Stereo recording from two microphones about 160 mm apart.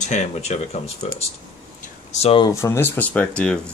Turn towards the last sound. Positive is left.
turn(degrees=5)  # may be behind; listen again after turning